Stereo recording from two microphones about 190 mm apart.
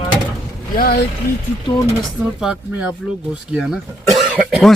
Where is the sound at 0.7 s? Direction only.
55° left (ahead or behind).